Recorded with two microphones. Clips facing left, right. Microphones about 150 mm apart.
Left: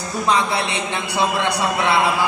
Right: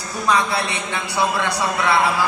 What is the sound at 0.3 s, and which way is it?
A man's voice, 20° left (ahead or behind).